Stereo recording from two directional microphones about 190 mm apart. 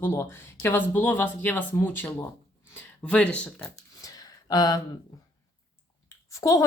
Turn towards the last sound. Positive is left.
turn(degrees=15)  # may be behind; listen again after turning